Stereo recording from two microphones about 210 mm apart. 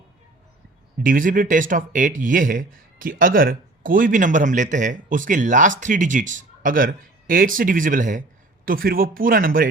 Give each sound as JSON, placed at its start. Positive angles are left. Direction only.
{"t": 1.0, "sound": "speech", "side_deg": -40}